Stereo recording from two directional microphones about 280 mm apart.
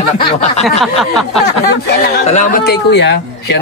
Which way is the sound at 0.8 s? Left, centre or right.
Centre.